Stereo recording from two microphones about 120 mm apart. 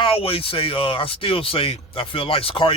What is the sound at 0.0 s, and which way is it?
Speech, 50° left (ahead or behind).